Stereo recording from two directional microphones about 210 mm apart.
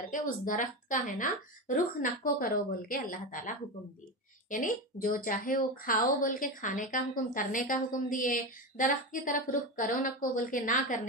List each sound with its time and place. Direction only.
0.1 s speech: 40° left (ahead or behind)